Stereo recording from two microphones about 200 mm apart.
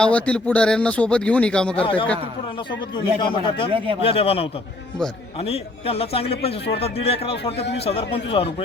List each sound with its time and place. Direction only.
0.0 s speech: 5° left (ahead or behind)
1.8 s a man's voice: 25° left (ahead or behind)
3.2 s a man's voice: 25° left (ahead or behind)
3.7 s speech: 25° right (ahead or behind)
4.0 s a man's voice: 30° left (ahead or behind)
5.5 s a man's voice: 30° left (ahead or behind)